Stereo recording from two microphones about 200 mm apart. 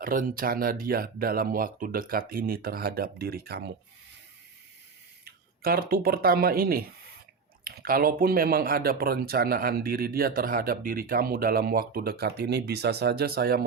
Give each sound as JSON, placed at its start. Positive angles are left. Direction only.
{"t": 0.0, "sound": "speech", "side_deg": -45}
{"t": 5.2, "sound": "speech", "side_deg": -50}